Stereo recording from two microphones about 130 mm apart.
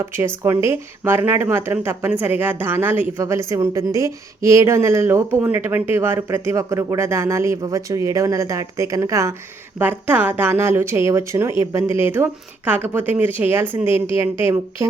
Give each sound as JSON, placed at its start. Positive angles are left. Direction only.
{"t": 0.0, "sound": "a woman's voice", "side_deg": -20}